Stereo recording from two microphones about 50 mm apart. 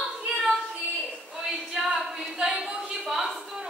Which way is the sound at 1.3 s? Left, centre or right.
Centre.